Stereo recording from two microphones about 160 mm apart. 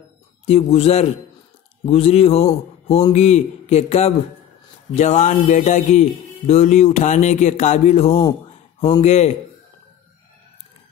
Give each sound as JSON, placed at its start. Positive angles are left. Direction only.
{"t": 0.5, "sound": "a man's voice", "side_deg": 40}
{"t": 2.9, "sound": "music", "side_deg": 40}